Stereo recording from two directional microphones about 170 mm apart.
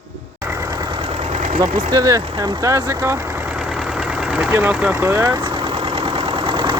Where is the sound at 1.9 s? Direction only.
20° right (ahead or behind).